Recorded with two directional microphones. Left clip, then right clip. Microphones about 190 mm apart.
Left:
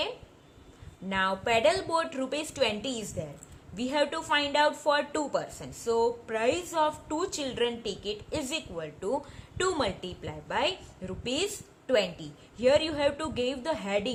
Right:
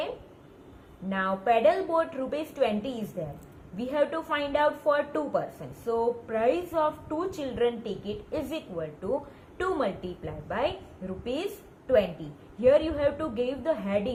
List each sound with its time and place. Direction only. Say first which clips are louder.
1.1 s a woman's voice: right 1 dB; 65° left (ahead or behind)
12.5 s a woman's voice: right 2 dB; 65° left (ahead or behind)